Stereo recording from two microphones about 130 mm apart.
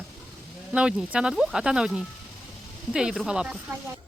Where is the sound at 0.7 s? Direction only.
5° right (ahead or behind).